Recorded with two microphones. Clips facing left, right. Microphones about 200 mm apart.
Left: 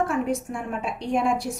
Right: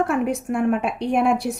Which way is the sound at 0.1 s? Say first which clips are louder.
Right 4 dB; 65° right (ahead or behind).